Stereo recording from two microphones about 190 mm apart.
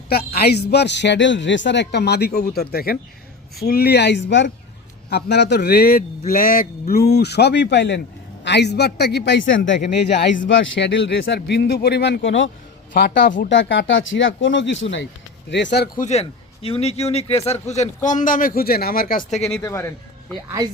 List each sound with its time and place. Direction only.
0.1 s a man's voice: 55° left (ahead or behind); by 9.8 s 75° left (ahead or behind)
9.9 s a man's voice: 60° left (ahead or behind)
10.4 s a man's voice: 80° left
12.9 s speech: 50° left (ahead or behind)
13.5 s a man's voice: 75° left (ahead or behind)
16.0 s a man's voice: 35° left (ahead or behind)
19.6 s a man's voice: 15° left (ahead or behind)